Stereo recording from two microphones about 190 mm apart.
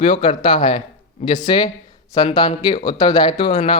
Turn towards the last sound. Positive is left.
turn(degrees=25)  # may be behind; listen again after turning